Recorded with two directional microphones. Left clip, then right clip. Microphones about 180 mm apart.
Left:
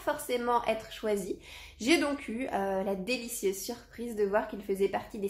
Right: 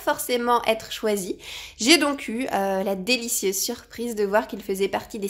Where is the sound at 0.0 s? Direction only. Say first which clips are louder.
Right 8 dB; 50° right (ahead or behind).